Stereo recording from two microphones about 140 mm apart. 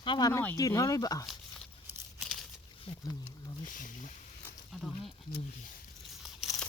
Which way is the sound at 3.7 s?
70° left (ahead or behind).